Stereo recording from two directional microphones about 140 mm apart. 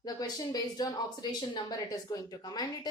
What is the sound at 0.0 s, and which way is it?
A woman's voice, 30° left (ahead or behind).